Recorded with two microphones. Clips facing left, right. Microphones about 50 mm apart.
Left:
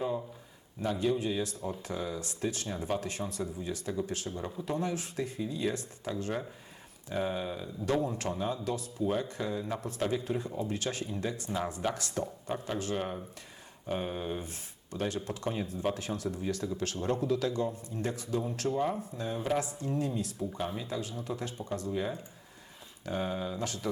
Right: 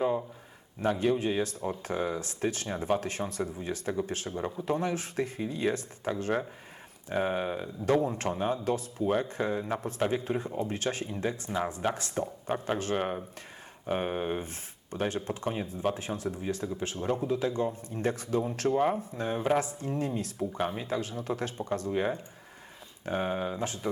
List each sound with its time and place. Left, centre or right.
0.8 s speech: right
11.5 s speech: right